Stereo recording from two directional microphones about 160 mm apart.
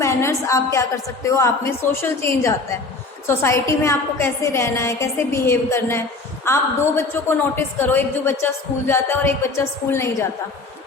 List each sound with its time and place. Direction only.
0.0 s a woman's voice: 20° left (ahead or behind)